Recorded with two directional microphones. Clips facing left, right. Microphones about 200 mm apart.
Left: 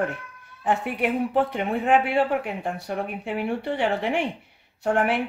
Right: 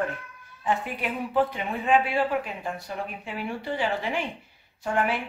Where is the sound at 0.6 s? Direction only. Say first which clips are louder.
Left 4 dB; 60° left (ahead or behind).